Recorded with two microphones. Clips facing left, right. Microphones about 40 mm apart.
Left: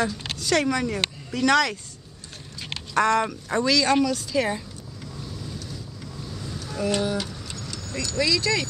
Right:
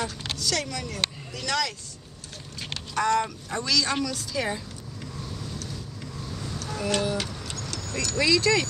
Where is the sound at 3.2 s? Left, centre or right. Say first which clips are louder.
Left 7 dB; centre.